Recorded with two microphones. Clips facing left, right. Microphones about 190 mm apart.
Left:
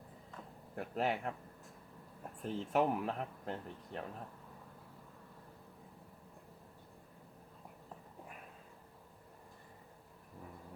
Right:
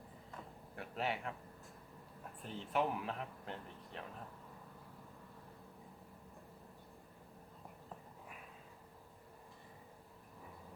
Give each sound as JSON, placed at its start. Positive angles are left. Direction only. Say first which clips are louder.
{"t": 0.8, "sound": "a man's voice", "louder": "left 5 dB", "side_deg": 45}
{"t": 2.4, "sound": "speech", "louder": "left 4 dB", "side_deg": 40}